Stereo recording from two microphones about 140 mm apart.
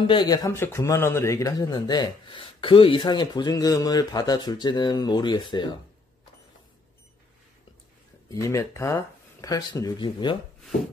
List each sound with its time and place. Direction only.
0.0 s speech: 35° left (ahead or behind)
8.3 s speech: 25° left (ahead or behind)